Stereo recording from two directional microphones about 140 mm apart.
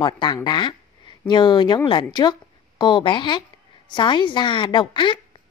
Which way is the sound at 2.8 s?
35° left (ahead or behind).